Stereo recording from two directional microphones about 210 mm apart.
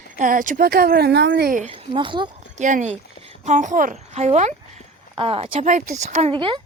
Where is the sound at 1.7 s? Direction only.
25° right (ahead or behind).